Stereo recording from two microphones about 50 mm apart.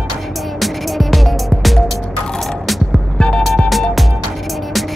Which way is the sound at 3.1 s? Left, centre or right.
Centre.